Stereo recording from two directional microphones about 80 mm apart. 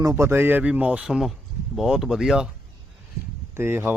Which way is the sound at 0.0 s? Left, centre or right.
Right.